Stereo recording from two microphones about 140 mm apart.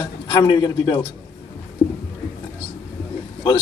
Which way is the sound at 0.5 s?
30° left (ahead or behind).